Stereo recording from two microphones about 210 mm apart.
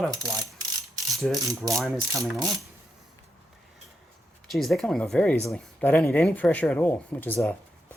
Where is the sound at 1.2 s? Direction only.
Centre (ahead or behind).